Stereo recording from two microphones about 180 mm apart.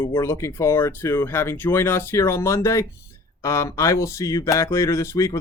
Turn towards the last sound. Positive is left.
turn(degrees=15)  # may be behind; listen again after turning